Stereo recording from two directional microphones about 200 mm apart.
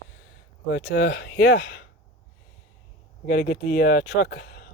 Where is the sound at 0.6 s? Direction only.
55° left (ahead or behind).